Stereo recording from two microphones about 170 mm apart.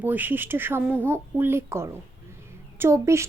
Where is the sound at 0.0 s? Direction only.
10° right (ahead or behind).